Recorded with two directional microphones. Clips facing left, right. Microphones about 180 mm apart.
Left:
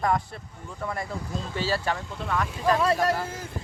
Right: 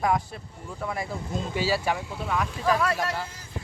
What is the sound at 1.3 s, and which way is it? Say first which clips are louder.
Speech: right 2 dB; 20° right (ahead or behind).